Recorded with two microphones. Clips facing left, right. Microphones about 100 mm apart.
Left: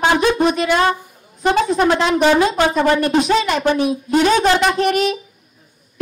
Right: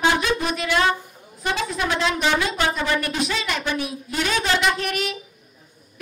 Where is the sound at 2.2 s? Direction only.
40° left (ahead or behind).